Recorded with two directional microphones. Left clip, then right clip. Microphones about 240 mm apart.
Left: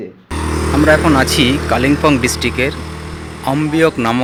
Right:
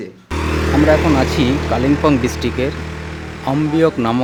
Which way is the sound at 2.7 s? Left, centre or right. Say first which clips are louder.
Left 1 dB; left.